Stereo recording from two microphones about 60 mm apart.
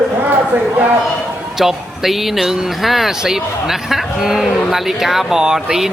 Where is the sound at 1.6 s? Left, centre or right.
Centre.